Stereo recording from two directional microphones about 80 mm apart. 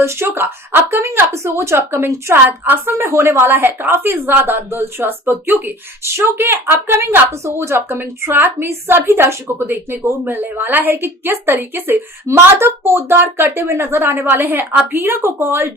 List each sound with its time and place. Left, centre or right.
0.0 s a woman's voice: right